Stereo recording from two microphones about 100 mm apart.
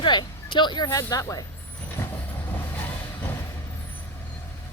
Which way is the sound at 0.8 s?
35° left (ahead or behind).